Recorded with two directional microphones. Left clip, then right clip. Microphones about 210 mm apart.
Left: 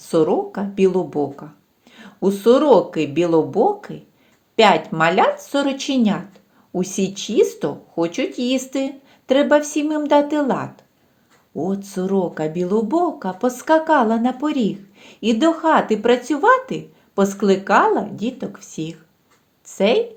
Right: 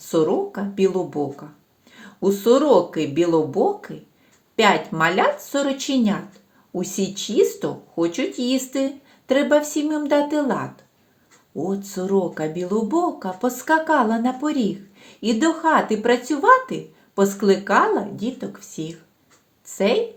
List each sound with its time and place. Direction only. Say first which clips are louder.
0.1 s speech: left 2 dB; 35° left (ahead or behind)